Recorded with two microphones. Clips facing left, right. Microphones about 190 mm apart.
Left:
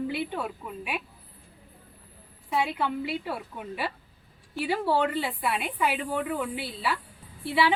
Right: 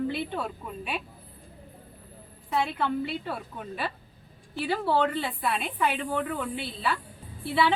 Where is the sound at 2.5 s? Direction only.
10° left (ahead or behind).